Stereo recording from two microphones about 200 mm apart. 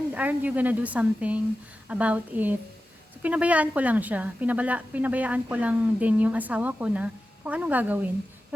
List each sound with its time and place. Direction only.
0.1 s a woman's voice: 10° right (ahead or behind)